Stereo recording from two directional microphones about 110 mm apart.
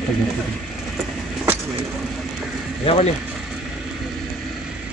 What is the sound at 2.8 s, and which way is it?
Speech, 60° left (ahead or behind).